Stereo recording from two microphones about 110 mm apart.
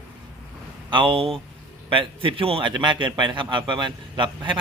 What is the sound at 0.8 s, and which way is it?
A man's voice, 50° right (ahead or behind).